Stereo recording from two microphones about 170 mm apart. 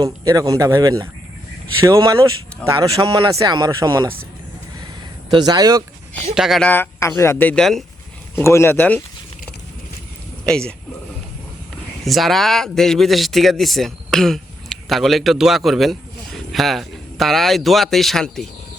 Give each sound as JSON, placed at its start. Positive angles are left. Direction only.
{"t": 0.0, "sound": "speech", "side_deg": -20}
{"t": 5.3, "sound": "speech", "side_deg": -25}
{"t": 6.3, "sound": "speech", "side_deg": 0}
{"t": 6.7, "sound": "speech", "side_deg": 10}
{"t": 8.4, "sound": "speech", "side_deg": 15}
{"t": 10.4, "sound": "speech", "side_deg": 5}
{"t": 12.0, "sound": "speech", "side_deg": 0}